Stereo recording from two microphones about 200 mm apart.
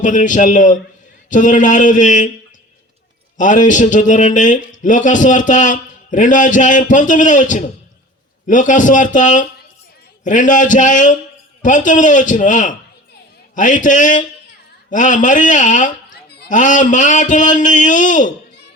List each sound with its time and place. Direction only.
0.0 s speech: 40° left (ahead or behind)
3.3 s speech: 40° left (ahead or behind)